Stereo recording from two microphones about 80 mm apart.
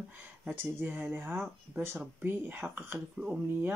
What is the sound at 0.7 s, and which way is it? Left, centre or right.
Speech, right.